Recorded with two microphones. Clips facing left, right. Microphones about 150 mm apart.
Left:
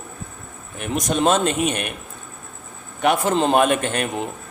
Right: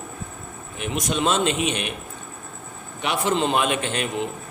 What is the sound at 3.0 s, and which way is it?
Speech, 45° left (ahead or behind).